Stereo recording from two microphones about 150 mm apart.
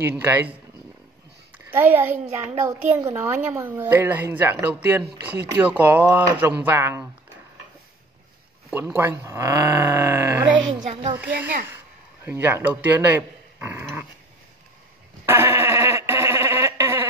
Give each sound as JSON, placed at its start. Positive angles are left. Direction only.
{"t": 0.2, "sound": "speech", "side_deg": -10}
{"t": 1.7, "sound": "speech", "side_deg": -15}
{"t": 8.7, "sound": "speech", "side_deg": -15}
{"t": 10.4, "sound": "speech", "side_deg": -30}
{"t": 11.1, "sound": "a man's voice", "side_deg": -10}
{"t": 15.2, "sound": "bleat", "side_deg": -20}